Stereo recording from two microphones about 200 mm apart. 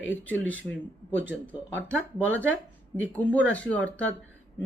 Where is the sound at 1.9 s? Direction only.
5° left (ahead or behind).